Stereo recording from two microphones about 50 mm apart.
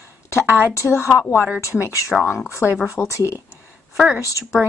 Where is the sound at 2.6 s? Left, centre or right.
Right.